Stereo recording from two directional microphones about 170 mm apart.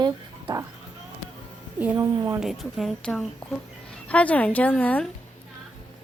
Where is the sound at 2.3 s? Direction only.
Centre (ahead or behind).